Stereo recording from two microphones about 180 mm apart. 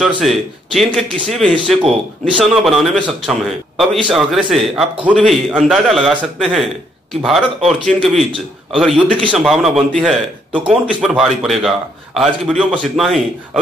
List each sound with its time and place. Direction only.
0.0 s a man's voice: centre (ahead or behind)